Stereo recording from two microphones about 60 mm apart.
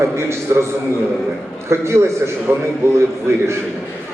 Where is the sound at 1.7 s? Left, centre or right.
Right.